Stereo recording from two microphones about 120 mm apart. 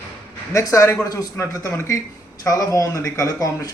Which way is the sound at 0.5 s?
25° left (ahead or behind).